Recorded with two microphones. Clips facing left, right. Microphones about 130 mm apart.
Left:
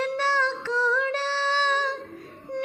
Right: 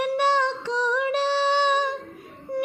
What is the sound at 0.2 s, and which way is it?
Music, 15° right (ahead or behind).